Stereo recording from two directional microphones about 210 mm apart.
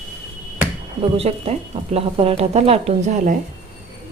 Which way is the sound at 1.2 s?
30° right (ahead or behind).